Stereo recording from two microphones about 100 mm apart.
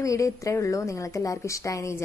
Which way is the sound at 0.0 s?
35° left (ahead or behind).